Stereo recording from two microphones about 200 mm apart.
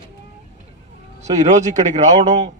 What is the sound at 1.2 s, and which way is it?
A man's voice, 35° right (ahead or behind).